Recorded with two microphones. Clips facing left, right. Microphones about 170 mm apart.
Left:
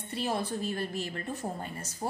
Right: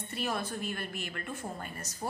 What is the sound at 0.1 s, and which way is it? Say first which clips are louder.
A woman's voice: left 3 dB; 30° left (ahead or behind).